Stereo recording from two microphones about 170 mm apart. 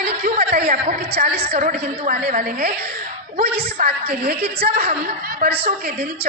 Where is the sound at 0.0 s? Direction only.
60° right (ahead or behind).